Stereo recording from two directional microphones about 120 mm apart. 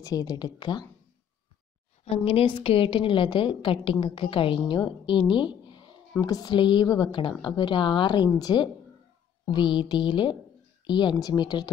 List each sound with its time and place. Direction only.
0.0 s a woman's voice: 30° left (ahead or behind)
2.0 s a woman's voice: 50° left (ahead or behind)